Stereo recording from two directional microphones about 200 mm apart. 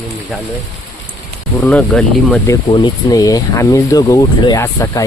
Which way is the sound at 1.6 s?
5° left (ahead or behind).